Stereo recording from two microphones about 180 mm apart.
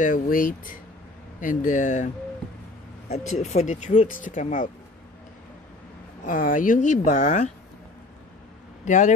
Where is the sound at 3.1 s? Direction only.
40° left (ahead or behind).